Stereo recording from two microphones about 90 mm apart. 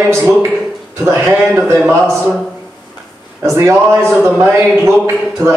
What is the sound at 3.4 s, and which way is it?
A man's voice, 30° right (ahead or behind).